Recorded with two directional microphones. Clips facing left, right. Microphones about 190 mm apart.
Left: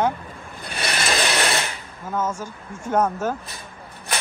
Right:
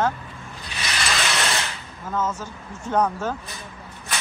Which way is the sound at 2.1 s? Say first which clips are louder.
Left 1 dB; 10° left (ahead or behind).